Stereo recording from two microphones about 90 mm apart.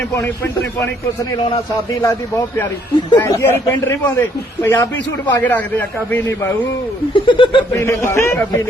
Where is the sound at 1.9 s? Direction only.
35° left (ahead or behind).